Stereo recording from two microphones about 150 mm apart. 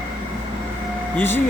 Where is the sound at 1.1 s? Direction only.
15° left (ahead or behind).